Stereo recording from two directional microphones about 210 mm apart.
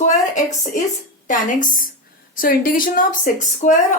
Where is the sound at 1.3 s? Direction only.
35° left (ahead or behind).